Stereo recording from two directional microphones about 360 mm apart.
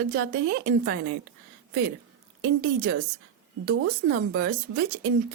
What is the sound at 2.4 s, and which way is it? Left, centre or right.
Speech, right.